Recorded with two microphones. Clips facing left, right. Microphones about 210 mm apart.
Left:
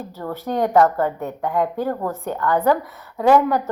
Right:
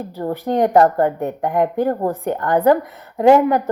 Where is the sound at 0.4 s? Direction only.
15° right (ahead or behind).